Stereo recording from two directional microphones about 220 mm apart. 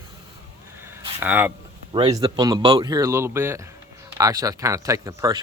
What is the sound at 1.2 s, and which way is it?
Speech, 10° right (ahead or behind).